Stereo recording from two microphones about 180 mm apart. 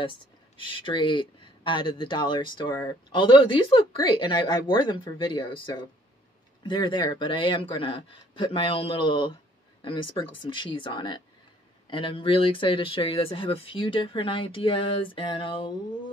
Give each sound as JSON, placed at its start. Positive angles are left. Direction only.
{"t": 0.0, "sound": "speech", "side_deg": 30}